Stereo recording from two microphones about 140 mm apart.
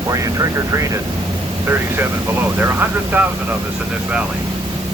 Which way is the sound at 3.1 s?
15° right (ahead or behind).